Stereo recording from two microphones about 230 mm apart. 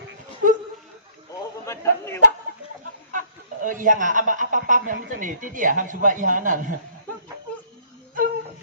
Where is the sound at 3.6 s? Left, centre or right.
Right.